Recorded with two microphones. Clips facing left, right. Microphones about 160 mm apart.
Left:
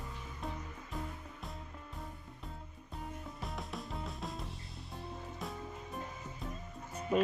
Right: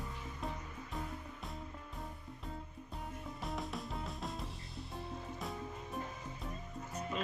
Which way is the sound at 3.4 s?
Centre (ahead or behind).